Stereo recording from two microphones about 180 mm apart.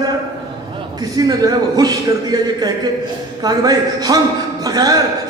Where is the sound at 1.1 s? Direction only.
20° right (ahead or behind).